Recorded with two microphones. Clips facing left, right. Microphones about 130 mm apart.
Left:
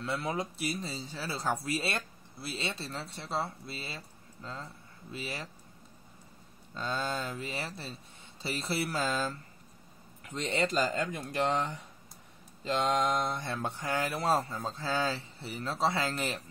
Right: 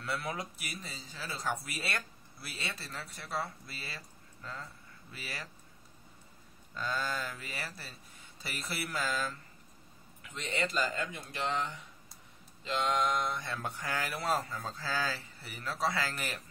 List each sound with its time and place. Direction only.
0.0 s speech: 20° left (ahead or behind)
6.7 s speech: 25° left (ahead or behind)
10.2 s speech: 40° left (ahead or behind)